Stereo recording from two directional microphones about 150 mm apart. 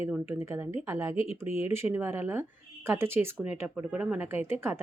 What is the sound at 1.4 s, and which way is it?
Speech, 40° left (ahead or behind).